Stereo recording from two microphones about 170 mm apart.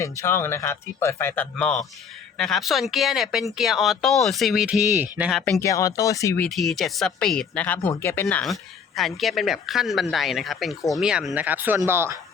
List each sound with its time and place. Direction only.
0.0 s speech: 15° left (ahead or behind); by 5.4 s 10° right (ahead or behind)
5.5 s speech: 20° left (ahead or behind)
6.4 s speech: centre (ahead or behind); by 12.2 s 15° right (ahead or behind)